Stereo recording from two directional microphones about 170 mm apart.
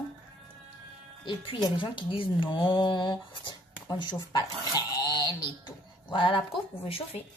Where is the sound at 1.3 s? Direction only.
25° left (ahead or behind).